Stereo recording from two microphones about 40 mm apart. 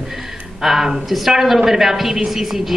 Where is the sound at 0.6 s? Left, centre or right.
Centre.